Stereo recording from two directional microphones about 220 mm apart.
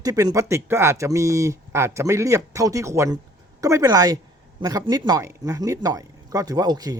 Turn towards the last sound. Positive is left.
turn(degrees=-15)  # may be behind; listen again after turning